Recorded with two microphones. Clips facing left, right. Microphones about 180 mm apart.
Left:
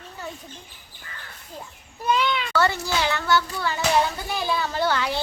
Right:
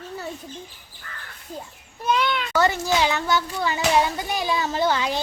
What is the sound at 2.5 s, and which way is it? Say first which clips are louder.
A child's voice: right 5 dB; 15° right (ahead or behind).